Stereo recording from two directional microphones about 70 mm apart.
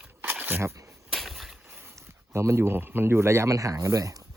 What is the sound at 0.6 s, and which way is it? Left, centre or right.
Speech, right.